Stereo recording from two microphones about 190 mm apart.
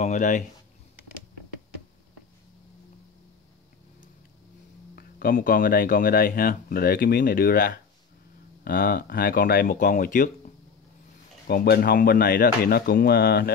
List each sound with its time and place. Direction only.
0.0 s speech: 40° left (ahead or behind)
4.9 s speech: 50° left (ahead or behind)
11.4 s speech: 55° left (ahead or behind)